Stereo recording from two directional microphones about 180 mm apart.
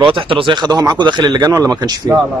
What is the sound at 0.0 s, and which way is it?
Speech, 30° right (ahead or behind).